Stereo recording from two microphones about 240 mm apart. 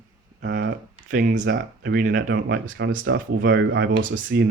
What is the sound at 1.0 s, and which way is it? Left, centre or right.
Speech, right.